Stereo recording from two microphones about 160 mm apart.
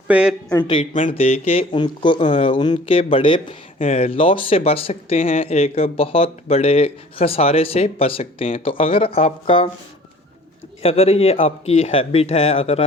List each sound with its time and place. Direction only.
0.1 s speech: 5° right (ahead or behind)
1.1 s speech: 40° left (ahead or behind)
10.8 s speech: 40° left (ahead or behind)